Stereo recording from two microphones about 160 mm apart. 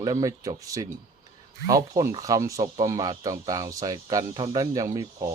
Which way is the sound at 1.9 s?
20° right (ahead or behind).